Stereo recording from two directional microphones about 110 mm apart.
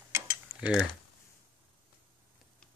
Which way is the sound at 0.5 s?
30° right (ahead or behind).